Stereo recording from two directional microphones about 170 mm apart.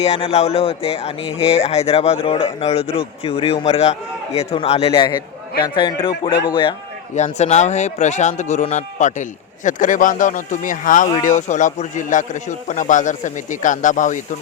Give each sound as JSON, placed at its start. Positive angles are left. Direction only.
{"t": 0.0, "sound": "a man's voice", "side_deg": 40}
{"t": 7.3, "sound": "speech", "side_deg": 40}